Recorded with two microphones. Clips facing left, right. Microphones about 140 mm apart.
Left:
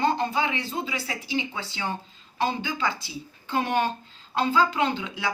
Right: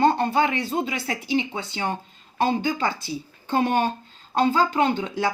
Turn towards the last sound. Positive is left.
turn(degrees=-40)  # may be behind; listen again after turning